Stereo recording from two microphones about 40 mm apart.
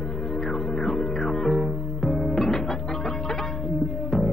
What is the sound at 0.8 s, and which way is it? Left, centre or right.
Music, centre.